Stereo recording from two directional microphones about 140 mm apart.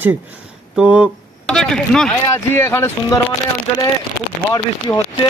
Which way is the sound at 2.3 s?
20° left (ahead or behind).